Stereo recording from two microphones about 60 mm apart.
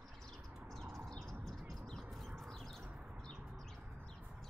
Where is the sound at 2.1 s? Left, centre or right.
Centre.